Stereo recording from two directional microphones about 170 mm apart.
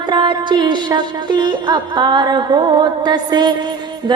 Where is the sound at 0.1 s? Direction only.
25° right (ahead or behind).